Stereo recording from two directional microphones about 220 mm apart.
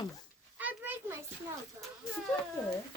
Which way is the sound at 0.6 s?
10° right (ahead or behind).